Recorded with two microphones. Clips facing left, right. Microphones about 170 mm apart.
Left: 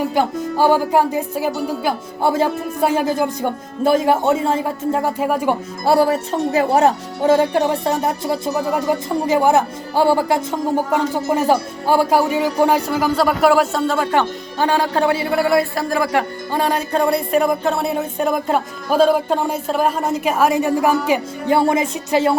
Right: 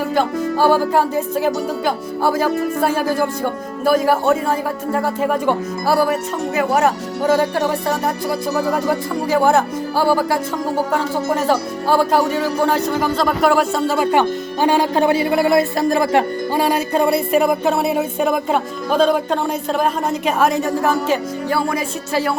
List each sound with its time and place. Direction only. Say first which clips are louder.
0.1 s speech: right 1 dB; 15° left (ahead or behind)
2.2 s speech: even; 25° left (ahead or behind)
5.2 s speech: right 2 dB; 10° left (ahead or behind)
5.8 s speech: left 3 dB; 25° left (ahead or behind); by 16.2 s 25° right (ahead or behind)
16.5 s speech: right 2 dB; 10° right (ahead or behind); by 22.4 s 20° left (ahead or behind)